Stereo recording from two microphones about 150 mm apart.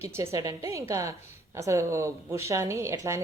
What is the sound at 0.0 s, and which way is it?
A woman's voice, 20° right (ahead or behind).